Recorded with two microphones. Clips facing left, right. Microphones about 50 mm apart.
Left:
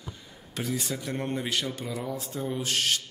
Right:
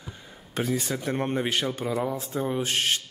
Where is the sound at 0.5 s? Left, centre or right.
Right.